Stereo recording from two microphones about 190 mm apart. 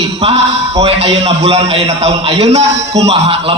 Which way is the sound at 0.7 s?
30° right (ahead or behind).